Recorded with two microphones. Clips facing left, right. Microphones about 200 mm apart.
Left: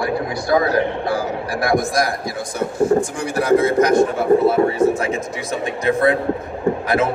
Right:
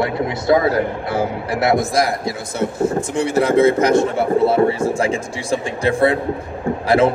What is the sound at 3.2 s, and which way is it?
A man's voice, 25° right (ahead or behind).